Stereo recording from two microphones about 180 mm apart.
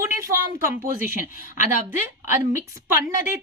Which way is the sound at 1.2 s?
45° left (ahead or behind).